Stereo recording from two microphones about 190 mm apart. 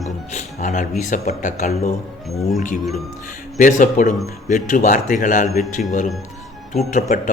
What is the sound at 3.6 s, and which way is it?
Speech, 45° left (ahead or behind).